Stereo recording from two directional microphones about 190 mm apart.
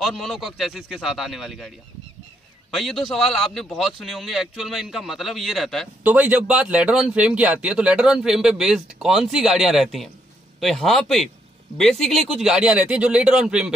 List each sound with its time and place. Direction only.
0.0 s a man's voice: centre (ahead or behind)
2.7 s a man's voice: centre (ahead or behind)